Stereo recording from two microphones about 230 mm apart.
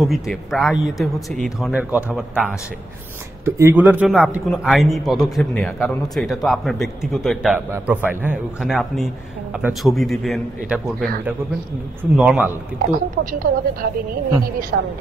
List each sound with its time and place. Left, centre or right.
0.0 s a man's voice: centre
13.2 s a woman's voice: right